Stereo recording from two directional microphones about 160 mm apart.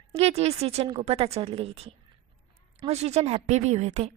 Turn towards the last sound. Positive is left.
turn(degrees=-45)  # may be behind; listen again after turning